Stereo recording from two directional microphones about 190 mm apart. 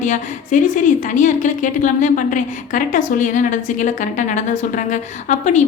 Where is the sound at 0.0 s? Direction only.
40° left (ahead or behind).